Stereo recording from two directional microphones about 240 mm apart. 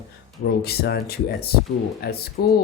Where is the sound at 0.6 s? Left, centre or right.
Left.